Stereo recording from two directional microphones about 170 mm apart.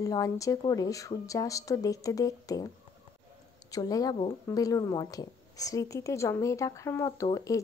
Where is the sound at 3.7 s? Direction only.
20° left (ahead or behind).